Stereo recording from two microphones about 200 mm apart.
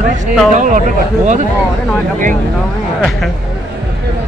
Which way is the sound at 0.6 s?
40° right (ahead or behind).